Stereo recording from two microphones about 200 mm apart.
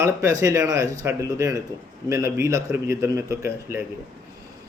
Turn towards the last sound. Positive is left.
turn(degrees=-15)  # may be behind; listen again after turning